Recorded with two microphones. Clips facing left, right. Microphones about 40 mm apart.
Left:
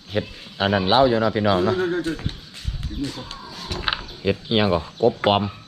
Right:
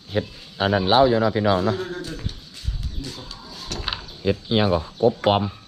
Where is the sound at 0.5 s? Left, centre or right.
Left.